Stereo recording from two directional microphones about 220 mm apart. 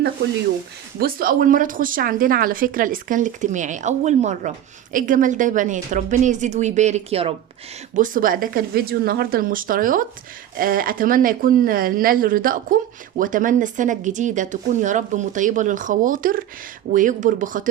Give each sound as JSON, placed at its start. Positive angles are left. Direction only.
{"t": 0.9, "sound": "speech", "side_deg": -40}
{"t": 7.9, "sound": "speech", "side_deg": -40}